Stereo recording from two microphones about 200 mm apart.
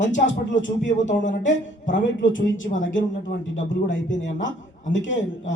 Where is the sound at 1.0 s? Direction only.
40° left (ahead or behind).